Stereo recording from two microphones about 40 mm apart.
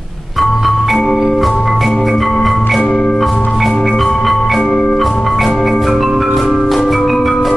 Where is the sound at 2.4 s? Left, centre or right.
Centre.